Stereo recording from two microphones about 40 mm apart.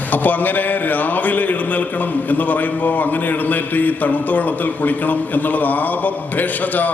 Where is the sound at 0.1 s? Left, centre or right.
Left.